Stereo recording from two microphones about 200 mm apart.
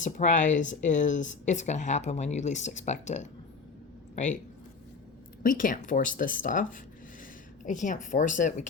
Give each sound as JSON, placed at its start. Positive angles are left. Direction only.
{"t": 0.0, "sound": "speech", "side_deg": 40}
{"t": 5.4, "sound": "speech", "side_deg": 45}